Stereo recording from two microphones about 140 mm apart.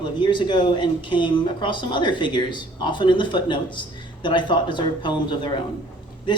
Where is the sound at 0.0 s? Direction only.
35° left (ahead or behind).